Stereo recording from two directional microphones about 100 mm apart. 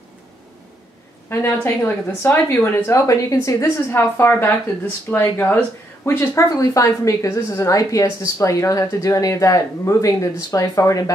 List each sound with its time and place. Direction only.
1.3 s a woman's voice: 20° left (ahead or behind)